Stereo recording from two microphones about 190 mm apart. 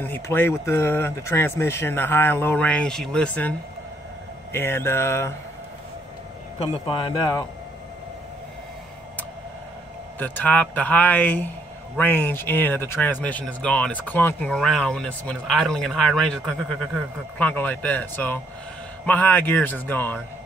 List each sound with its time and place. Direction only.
0.0 s speech: 10° left (ahead or behind)
6.6 s a man's voice: 30° left (ahead or behind)
10.1 s speech: 10° left (ahead or behind)